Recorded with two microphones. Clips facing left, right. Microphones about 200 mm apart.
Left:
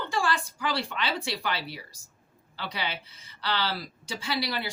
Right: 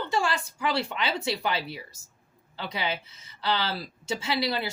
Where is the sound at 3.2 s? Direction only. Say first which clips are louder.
Right 2 dB; 25° right (ahead or behind).